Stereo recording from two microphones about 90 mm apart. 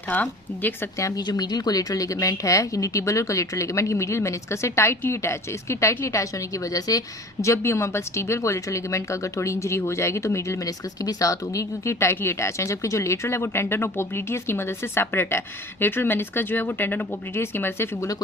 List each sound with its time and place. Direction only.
0.1 s speech: 20° left (ahead or behind)
0.9 s speech: 40° left (ahead or behind)
6.7 s speech: 40° left (ahead or behind)
7.4 s speech: 30° left (ahead or behind)